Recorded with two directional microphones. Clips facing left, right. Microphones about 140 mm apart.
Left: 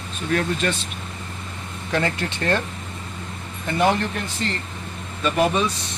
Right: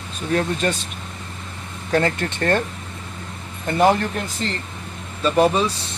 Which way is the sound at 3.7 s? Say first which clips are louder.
Right 3 dB; 45° right (ahead or behind).